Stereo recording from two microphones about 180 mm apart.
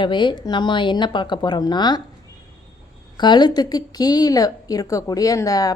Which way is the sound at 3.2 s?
25° left (ahead or behind).